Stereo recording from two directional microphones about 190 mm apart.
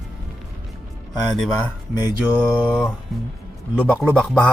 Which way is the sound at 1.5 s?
20° left (ahead or behind).